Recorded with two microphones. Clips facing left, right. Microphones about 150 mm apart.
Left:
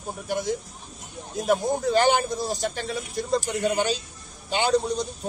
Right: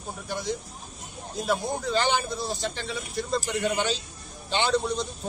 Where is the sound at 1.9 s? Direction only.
50° left (ahead or behind).